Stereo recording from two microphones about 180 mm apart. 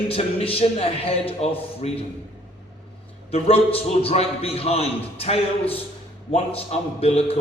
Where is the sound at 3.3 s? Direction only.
30° left (ahead or behind).